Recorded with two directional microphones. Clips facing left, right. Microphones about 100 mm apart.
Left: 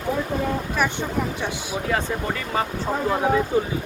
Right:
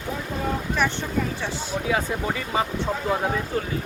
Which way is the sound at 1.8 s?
5° right (ahead or behind).